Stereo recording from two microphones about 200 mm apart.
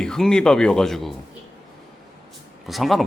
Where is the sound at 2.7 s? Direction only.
Centre (ahead or behind).